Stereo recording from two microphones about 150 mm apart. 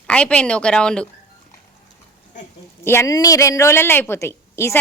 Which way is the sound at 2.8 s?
20° left (ahead or behind).